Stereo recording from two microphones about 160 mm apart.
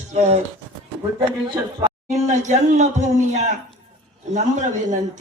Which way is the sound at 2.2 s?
50° right (ahead or behind).